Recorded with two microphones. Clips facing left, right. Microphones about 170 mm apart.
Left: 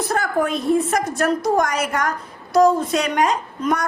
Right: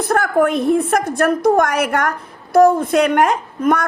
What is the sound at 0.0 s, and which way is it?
A woman's voice, 55° right (ahead or behind).